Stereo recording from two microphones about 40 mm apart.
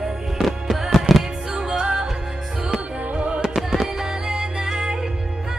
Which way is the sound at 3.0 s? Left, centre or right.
Right.